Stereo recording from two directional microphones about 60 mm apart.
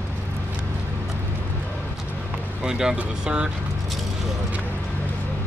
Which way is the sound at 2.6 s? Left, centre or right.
Centre.